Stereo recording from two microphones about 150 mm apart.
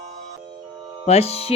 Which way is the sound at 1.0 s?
45° left (ahead or behind).